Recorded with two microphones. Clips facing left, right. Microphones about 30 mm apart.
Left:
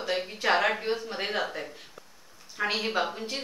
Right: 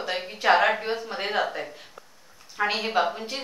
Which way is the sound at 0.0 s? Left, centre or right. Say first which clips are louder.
Right 3 dB; centre.